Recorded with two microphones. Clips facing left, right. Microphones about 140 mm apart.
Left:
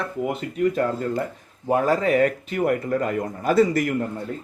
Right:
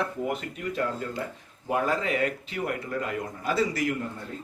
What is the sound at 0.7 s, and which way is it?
Speech, 45° left (ahead or behind).